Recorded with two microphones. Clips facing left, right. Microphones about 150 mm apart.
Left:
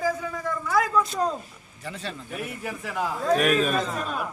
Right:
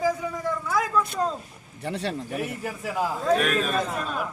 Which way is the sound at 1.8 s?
70° right (ahead or behind).